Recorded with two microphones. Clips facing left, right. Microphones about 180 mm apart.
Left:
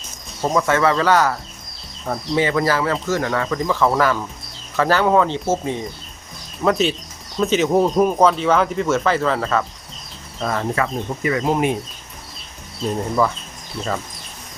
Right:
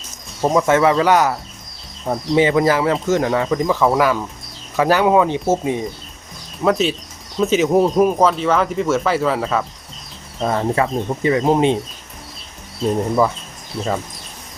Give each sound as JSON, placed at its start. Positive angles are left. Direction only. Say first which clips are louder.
{"t": 0.4, "sound": "speech", "louder": "right 3 dB", "side_deg": -20}
{"t": 10.4, "sound": "speech", "louder": "right 3 dB", "side_deg": -25}